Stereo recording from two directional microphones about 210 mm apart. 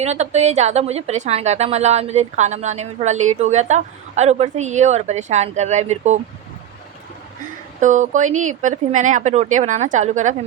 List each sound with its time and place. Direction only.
0.0 s a woman's voice: 30° right (ahead or behind)
7.8 s a woman's voice: 35° right (ahead or behind)